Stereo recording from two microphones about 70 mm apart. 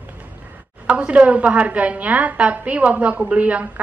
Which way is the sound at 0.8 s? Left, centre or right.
Centre.